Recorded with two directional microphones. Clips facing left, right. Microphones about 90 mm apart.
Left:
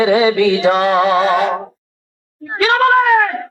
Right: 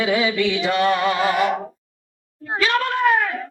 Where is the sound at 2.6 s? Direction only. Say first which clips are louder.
Left 8 dB; 90° left.